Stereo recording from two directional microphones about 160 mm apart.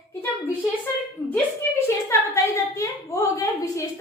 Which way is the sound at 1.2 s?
15° left (ahead or behind).